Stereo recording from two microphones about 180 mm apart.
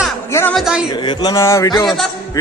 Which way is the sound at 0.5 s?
5° right (ahead or behind).